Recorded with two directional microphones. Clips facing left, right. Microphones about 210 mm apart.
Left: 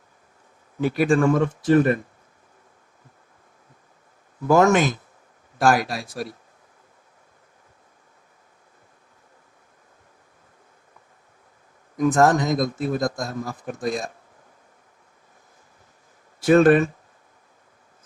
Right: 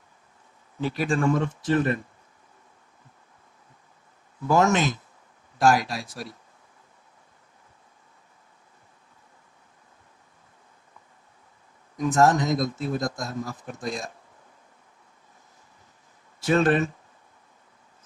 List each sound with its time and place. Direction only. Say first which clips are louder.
0.8 s speech: left 6 dB; 50° left (ahead or behind)
4.4 s speech: left 4 dB; 50° left (ahead or behind)
11.9 s speech: left 3 dB; 55° left (ahead or behind)
16.4 s speech: left 6 dB; 50° left (ahead or behind)